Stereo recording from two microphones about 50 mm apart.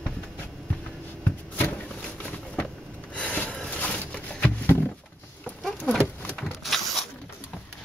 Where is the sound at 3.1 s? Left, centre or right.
Left.